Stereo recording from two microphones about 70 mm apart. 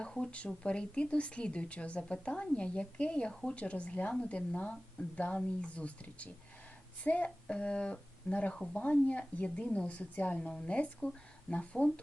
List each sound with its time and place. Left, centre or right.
0.0 s a woman's voice: centre